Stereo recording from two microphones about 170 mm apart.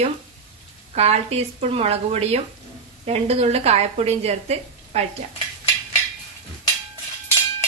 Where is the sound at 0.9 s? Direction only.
40° right (ahead or behind).